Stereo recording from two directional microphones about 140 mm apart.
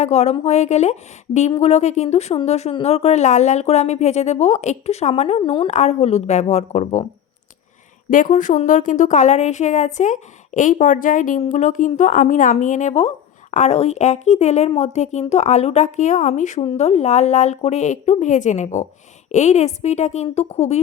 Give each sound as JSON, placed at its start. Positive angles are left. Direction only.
{"t": 0.0, "sound": "speech", "side_deg": 50}
{"t": 5.7, "sound": "speech", "side_deg": 50}
{"t": 8.1, "sound": "a woman's voice", "side_deg": 70}
{"t": 16.6, "sound": "a woman's voice", "side_deg": 45}